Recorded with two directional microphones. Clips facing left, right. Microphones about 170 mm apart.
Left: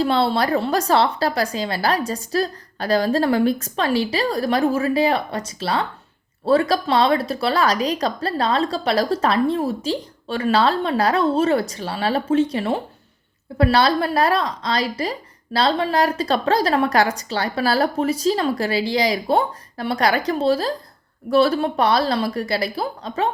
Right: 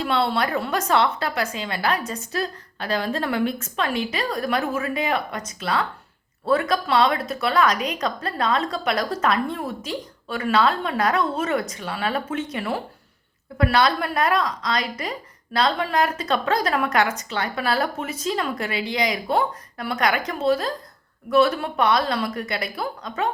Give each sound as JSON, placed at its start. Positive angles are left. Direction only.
{"t": 0.0, "sound": "a woman's voice", "side_deg": 35}